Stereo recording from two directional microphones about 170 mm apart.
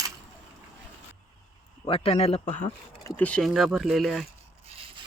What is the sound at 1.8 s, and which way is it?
Speech, 35° left (ahead or behind).